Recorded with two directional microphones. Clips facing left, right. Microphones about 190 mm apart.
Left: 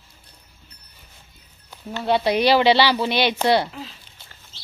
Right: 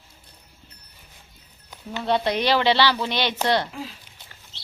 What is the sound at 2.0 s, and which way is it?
Speech, 10° left (ahead or behind).